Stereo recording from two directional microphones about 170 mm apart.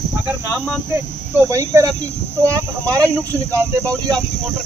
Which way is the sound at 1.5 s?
15° right (ahead or behind).